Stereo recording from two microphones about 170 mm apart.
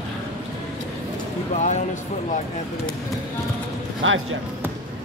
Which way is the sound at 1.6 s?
45° left (ahead or behind).